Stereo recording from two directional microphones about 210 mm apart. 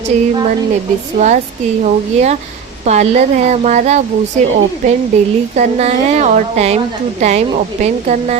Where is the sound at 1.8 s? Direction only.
30° right (ahead or behind).